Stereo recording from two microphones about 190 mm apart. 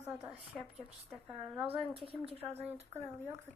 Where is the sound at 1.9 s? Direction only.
30° right (ahead or behind).